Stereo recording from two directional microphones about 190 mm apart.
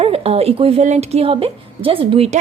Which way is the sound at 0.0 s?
30° right (ahead or behind).